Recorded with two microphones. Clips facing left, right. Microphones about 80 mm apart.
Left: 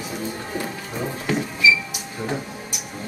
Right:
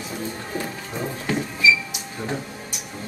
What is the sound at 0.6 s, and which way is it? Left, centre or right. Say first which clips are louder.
Music: even; centre.